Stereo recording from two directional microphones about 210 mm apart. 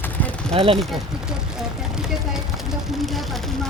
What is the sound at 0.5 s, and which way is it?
Speech, 25° right (ahead or behind).